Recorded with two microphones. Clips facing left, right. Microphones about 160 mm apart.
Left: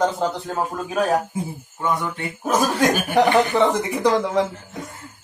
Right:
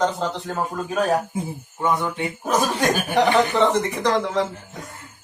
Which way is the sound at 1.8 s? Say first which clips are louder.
Right 2 dB; 15° right (ahead or behind).